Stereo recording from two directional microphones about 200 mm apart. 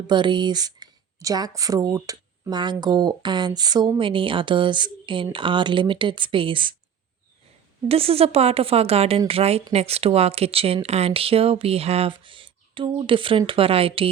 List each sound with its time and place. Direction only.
0.1 s speech: 25° right (ahead or behind)
7.9 s speech: 30° right (ahead or behind)